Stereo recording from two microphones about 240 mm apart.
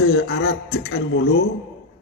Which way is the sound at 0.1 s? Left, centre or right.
Left.